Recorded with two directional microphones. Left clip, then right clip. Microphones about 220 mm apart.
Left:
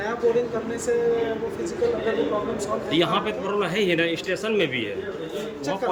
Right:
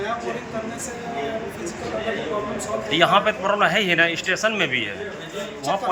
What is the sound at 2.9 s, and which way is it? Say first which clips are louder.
A man's voice: right 7 dB; 5° left (ahead or behind).